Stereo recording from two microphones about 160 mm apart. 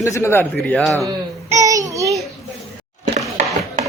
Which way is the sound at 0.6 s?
5° left (ahead or behind).